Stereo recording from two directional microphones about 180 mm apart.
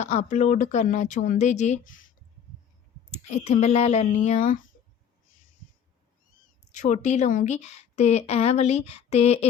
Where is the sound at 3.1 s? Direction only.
35° left (ahead or behind).